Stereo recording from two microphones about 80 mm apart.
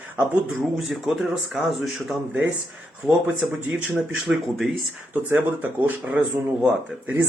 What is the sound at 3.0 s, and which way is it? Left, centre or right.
Speech, centre.